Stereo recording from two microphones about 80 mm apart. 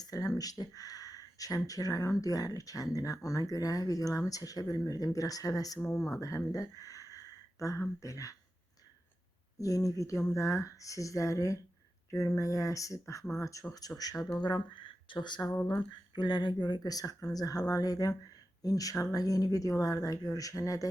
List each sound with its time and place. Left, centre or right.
0.0 s speech: left
9.6 s speech: left
14.4 s speech: left
16.1 s speech: left